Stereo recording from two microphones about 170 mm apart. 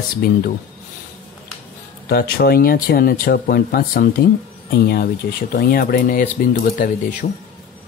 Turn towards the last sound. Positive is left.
turn(degrees=55)  # may be behind; listen again after turning